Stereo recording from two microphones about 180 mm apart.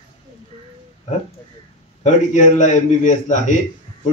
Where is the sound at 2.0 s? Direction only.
40° left (ahead or behind).